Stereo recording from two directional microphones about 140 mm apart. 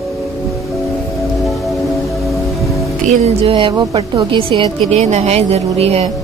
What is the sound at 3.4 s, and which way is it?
Speech, 40° right (ahead or behind).